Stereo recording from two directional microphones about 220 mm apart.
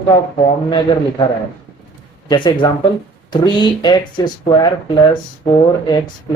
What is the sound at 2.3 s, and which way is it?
Speech, 20° left (ahead or behind).